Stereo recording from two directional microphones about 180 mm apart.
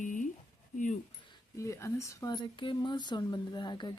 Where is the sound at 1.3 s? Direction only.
15° left (ahead or behind).